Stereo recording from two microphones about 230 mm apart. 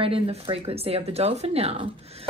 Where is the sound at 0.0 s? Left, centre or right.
Right.